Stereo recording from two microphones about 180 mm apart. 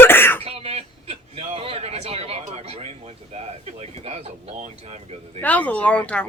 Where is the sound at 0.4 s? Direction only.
35° right (ahead or behind).